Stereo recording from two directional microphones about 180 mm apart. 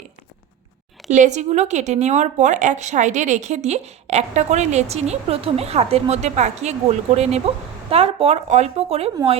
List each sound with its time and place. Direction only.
1.1 s speech: 40° right (ahead or behind)